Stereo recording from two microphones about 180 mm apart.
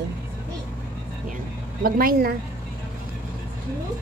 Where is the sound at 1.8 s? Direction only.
55° right (ahead or behind).